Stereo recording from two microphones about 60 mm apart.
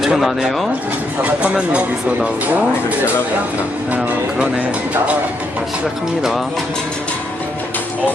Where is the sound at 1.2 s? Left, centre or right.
Right.